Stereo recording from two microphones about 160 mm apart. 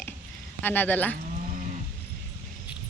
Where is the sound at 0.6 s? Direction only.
10° left (ahead or behind).